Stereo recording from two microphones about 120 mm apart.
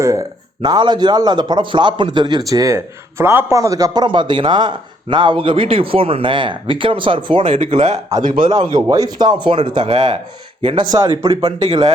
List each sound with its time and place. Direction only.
0.0 s speech: 25° right (ahead or behind)
2.5 s a man's voice: 25° right (ahead or behind); by 7.5 s 45° right (ahead or behind)
7.8 s speech: 65° right (ahead or behind)
8.4 s speech: 35° right (ahead or behind)
11.3 s a man's voice: 50° right (ahead or behind)